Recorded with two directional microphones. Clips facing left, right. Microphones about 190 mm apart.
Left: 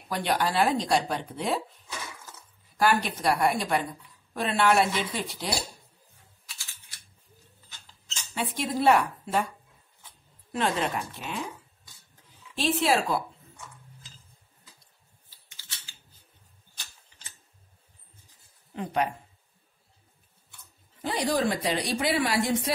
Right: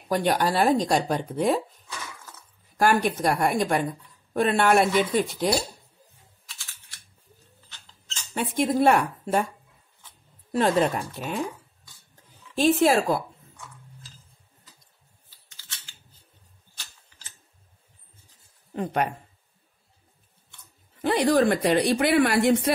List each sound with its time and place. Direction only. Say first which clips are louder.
0.1 s speech: right 4 dB; 45° right (ahead or behind)
2.8 s speech: right 3 dB; 50° right (ahead or behind)
8.4 s speech: right 6 dB; 50° right (ahead or behind)
10.5 s speech: right 6 dB; 40° right (ahead or behind)
12.5 s speech: right 5 dB; 45° right (ahead or behind)
18.7 s speech: right 2 dB; 50° right (ahead or behind)
21.0 s speech: right 6 dB; 60° right (ahead or behind)